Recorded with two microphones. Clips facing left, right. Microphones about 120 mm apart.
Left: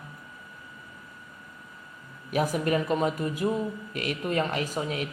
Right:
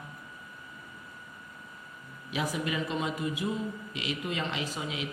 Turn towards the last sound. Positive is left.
turn(degrees=50)  # may be behind; listen again after turning